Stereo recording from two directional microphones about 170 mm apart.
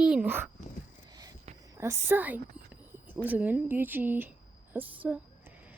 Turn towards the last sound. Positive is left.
turn(degrees=-10)  # may be behind; listen again after turning